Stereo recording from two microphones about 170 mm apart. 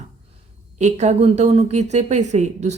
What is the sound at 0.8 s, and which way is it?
A woman's voice, 40° right (ahead or behind).